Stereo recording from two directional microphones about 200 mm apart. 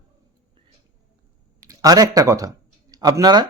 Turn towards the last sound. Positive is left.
turn(degrees=-20)  # may be behind; listen again after turning